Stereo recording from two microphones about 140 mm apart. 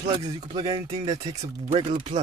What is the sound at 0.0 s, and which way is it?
Speech, 25° right (ahead or behind).